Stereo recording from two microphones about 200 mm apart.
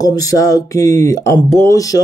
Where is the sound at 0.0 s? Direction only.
20° left (ahead or behind).